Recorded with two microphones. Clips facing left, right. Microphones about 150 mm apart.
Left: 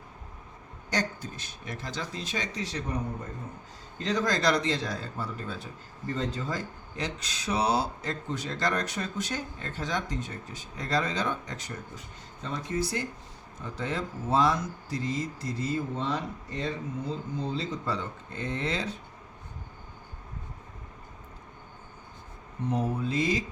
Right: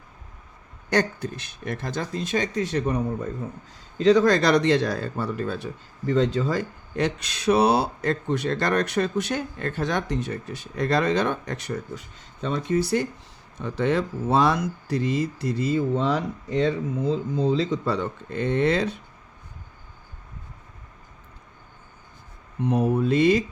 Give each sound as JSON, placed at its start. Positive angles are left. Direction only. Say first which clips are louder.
{"t": 0.9, "sound": "speech", "louder": "right 8 dB", "side_deg": -60}
{"t": 6.1, "sound": "speech", "louder": "right 10 dB", "side_deg": -90}
{"t": 22.6, "sound": "speech", "louder": "right 7 dB", "side_deg": -65}